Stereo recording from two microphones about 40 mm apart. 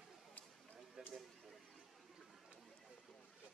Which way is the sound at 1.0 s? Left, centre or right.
Centre.